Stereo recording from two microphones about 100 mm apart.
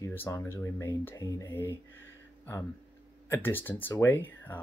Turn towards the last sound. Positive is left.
turn(degrees=20)  # may be behind; listen again after turning